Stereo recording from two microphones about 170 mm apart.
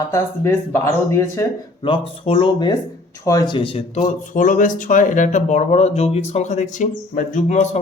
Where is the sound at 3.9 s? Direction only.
50° left (ahead or behind).